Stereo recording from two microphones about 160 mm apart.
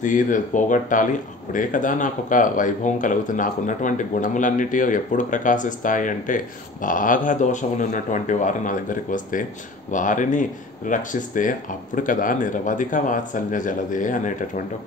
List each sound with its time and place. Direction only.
0.0 s speech: 55° left (ahead or behind)